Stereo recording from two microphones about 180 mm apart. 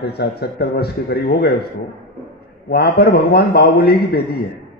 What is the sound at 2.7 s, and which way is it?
A man's voice, 60° left (ahead or behind).